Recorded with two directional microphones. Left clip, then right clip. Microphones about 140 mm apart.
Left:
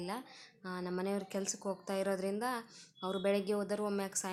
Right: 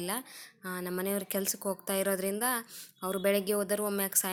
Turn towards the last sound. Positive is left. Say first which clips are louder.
# right 4 dB
turn(degrees=-15)  # may be behind; listen again after turning